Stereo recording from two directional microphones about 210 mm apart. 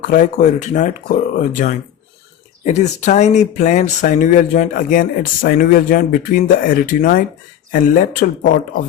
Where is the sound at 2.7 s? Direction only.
35° left (ahead or behind).